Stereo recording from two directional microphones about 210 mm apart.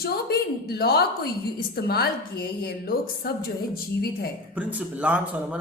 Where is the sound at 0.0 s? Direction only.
50° left (ahead or behind).